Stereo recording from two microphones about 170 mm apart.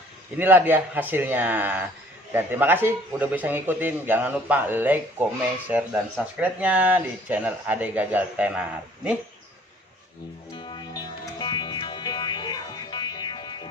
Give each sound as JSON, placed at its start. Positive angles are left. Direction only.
{"t": 0.3, "sound": "a man's voice", "side_deg": -10}
{"t": 10.5, "sound": "music", "side_deg": 25}